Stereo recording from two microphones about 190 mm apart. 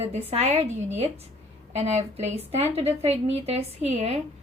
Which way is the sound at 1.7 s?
35° right (ahead or behind).